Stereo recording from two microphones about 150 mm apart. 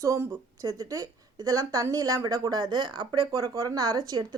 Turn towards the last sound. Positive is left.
turn(degrees=-25)  # may be behind; listen again after turning